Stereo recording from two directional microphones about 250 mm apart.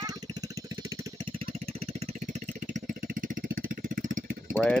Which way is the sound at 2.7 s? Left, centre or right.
Right.